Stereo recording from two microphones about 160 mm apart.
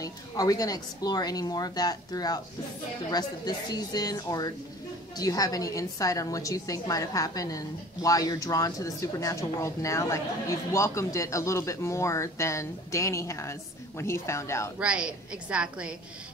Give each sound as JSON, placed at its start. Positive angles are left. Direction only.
{"t": 0.0, "sound": "a woman's voice", "side_deg": 20}
{"t": 14.8, "sound": "a woman's voice", "side_deg": -5}